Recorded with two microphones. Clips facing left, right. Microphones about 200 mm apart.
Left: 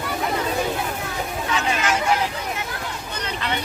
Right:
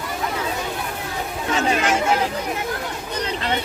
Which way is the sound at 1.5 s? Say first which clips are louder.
Right 4 dB; 40° right (ahead or behind).